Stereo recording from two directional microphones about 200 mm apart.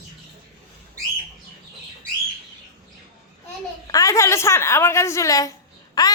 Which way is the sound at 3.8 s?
15° left (ahead or behind).